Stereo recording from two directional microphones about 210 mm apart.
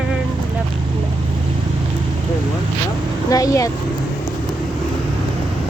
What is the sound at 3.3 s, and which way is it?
Speech, 15° left (ahead or behind).